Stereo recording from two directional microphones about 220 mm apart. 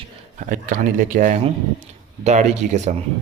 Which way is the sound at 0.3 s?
35° right (ahead or behind).